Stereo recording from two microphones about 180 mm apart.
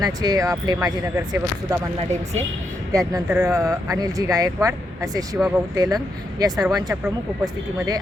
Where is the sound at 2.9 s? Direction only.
20° right (ahead or behind).